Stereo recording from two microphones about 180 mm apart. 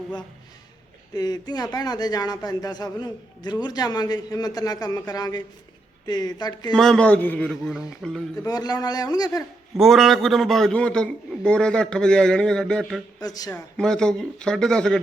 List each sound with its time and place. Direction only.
1.1 s a man's voice: 20° left (ahead or behind)
6.7 s a man's voice: 5° left (ahead or behind)
8.4 s a man's voice: 20° left (ahead or behind)
9.7 s a man's voice: centre (ahead or behind)
13.1 s speech: 20° left (ahead or behind)
13.5 s a man's voice: 5° left (ahead or behind)